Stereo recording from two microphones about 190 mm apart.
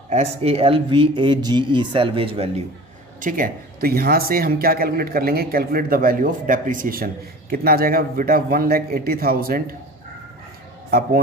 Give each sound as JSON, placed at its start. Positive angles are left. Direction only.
{"t": 0.1, "sound": "speech", "side_deg": -35}
{"t": 3.2, "sound": "speech", "side_deg": -45}